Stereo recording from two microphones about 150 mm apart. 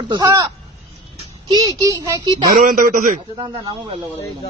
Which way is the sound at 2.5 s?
65° right (ahead or behind).